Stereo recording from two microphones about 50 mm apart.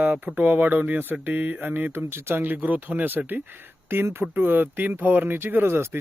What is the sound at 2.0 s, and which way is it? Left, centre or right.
Speech, right.